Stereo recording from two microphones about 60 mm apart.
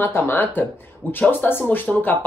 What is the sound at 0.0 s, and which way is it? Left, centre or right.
A man's voice, left.